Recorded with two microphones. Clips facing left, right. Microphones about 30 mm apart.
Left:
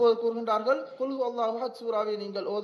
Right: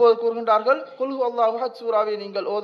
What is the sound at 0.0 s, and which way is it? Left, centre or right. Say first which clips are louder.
A man's voice: right 6 dB; right.